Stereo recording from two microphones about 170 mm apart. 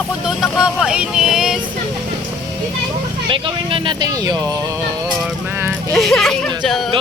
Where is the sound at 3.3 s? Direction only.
30° right (ahead or behind).